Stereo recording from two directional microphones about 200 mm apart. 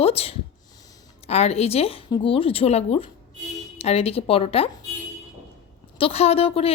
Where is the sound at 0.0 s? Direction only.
30° left (ahead or behind).